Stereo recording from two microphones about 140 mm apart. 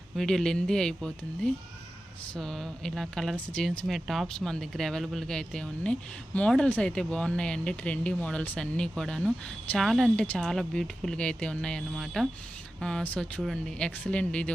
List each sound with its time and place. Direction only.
0.2 s speech: 5° left (ahead or behind)